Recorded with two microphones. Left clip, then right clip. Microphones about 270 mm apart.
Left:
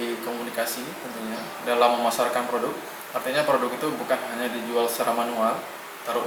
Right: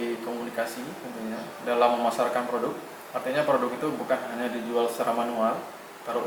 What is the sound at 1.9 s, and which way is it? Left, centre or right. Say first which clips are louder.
Speech: left 2 dB; right.